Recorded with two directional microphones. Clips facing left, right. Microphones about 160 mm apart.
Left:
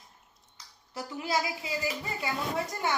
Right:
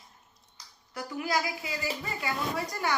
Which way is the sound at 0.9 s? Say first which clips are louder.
Right 1 dB; 25° left (ahead or behind).